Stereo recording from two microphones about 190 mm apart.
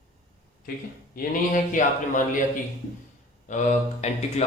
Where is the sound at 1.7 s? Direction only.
45° left (ahead or behind).